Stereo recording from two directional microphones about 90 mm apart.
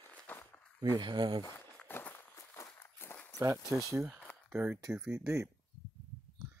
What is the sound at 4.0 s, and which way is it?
Speech, 20° right (ahead or behind).